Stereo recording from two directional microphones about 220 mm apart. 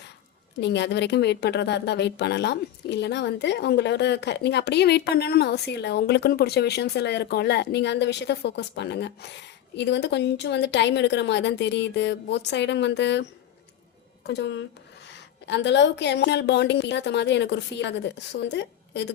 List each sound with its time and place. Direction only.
0.6 s a woman's voice: 50° left (ahead or behind)
14.3 s a woman's voice: 50° left (ahead or behind)